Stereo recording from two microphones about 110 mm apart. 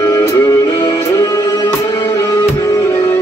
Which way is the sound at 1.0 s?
25° left (ahead or behind).